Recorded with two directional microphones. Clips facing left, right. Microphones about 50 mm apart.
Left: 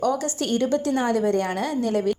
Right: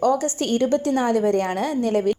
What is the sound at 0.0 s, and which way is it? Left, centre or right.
A woman's voice, right.